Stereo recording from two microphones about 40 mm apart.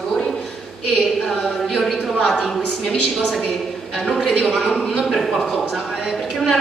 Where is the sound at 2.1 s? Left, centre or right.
Centre.